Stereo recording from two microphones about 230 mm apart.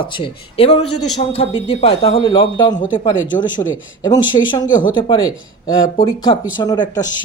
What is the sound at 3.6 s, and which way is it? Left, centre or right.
Speech, centre.